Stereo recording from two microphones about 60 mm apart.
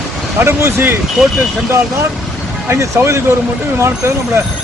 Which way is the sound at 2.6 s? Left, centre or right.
Right.